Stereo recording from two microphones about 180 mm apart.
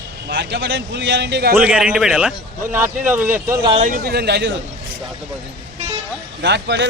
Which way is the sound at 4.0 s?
60° right (ahead or behind).